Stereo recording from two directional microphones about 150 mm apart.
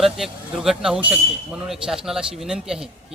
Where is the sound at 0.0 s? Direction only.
Centre (ahead or behind).